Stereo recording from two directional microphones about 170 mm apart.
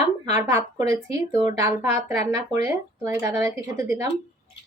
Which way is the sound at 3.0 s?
20° right (ahead or behind).